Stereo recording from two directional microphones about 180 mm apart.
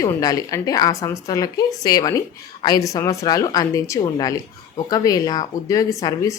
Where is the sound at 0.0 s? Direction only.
20° left (ahead or behind).